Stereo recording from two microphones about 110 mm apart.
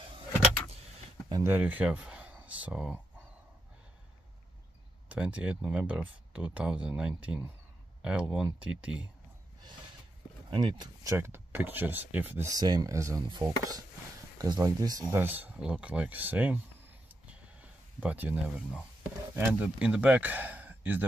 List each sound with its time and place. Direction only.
1.4 s speech: 15° right (ahead or behind)
5.1 s speech: 10° right (ahead or behind)
10.5 s speech: 45° right (ahead or behind)
11.1 s speech: 25° right (ahead or behind)
12.5 s speech: 35° right (ahead or behind)
15.0 s speech: 20° right (ahead or behind)
17.3 s a sound: 10° right (ahead or behind)
19.3 s speech: 20° right (ahead or behind)